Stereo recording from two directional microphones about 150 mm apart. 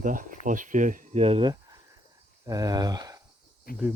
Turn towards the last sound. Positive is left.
turn(degrees=80)